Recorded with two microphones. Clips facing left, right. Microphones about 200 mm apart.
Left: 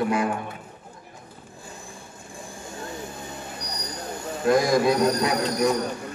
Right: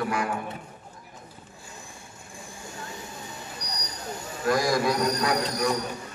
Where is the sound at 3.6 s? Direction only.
55° left (ahead or behind).